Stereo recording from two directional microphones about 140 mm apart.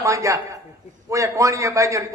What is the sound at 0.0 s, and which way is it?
A man's voice, 20° right (ahead or behind).